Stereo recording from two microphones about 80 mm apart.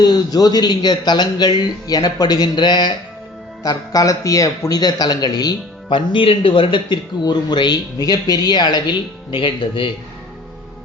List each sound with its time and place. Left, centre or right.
0.0 s a man's voice: left
3.6 s a man's voice: left
5.9 s a man's voice: left